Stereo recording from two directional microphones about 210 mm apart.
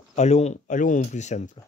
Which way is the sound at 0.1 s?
30° left (ahead or behind).